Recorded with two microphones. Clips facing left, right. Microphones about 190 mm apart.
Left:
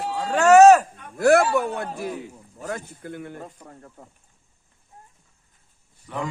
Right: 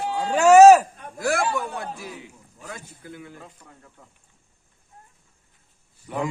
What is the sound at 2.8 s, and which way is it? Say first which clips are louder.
Speech: left 5 dB; 55° left (ahead or behind).